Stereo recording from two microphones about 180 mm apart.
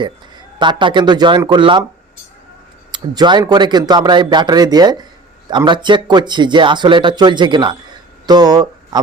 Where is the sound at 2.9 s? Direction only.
25° right (ahead or behind).